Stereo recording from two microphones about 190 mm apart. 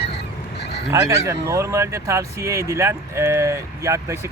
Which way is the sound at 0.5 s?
60° left (ahead or behind).